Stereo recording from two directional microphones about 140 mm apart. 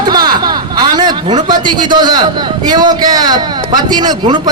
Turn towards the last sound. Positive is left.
turn(degrees=-30)  # may be behind; listen again after turning